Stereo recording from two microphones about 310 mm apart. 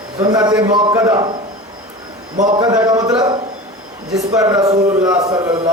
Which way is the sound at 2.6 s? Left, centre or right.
Centre.